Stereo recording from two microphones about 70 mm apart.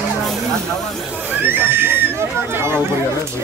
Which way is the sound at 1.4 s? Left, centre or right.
Right.